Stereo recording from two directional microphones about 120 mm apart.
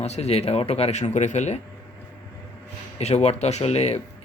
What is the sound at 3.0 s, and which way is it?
Speech, 65° left (ahead or behind).